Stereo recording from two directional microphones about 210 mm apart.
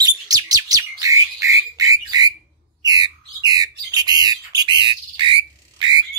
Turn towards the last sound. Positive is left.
turn(degrees=-20)  # may be behind; listen again after turning